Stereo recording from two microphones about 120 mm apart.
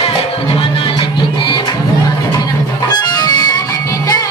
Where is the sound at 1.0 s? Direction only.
45° left (ahead or behind).